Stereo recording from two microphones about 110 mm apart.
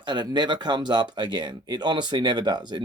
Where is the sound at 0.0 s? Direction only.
45° right (ahead or behind).